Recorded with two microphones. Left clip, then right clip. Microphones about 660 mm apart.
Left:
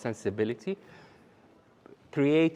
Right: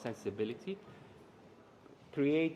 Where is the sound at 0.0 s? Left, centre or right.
Left.